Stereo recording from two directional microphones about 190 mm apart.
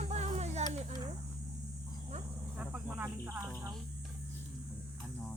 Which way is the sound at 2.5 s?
10° right (ahead or behind).